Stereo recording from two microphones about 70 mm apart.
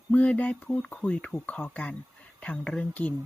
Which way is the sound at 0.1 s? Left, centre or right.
Left.